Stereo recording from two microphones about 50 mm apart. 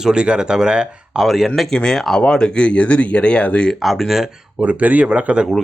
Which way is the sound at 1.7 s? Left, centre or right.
Centre.